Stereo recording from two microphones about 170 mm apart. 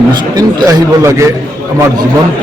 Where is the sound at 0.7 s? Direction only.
20° right (ahead or behind).